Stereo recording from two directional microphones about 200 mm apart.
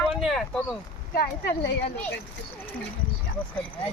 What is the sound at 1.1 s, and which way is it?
Speech, 50° left (ahead or behind).